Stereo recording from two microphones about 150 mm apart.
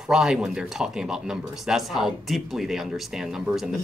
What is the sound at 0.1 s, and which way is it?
Speech, 5° right (ahead or behind).